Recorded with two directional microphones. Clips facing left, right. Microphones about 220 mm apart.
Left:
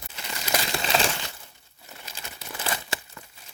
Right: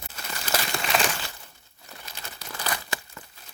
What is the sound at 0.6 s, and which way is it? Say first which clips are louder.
Crumpling: left 1 dB; 30° left (ahead or behind).